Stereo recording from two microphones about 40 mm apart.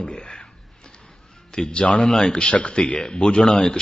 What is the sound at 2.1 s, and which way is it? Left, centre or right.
Speech, centre.